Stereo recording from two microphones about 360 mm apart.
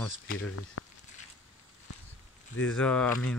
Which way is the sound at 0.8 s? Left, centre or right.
Left.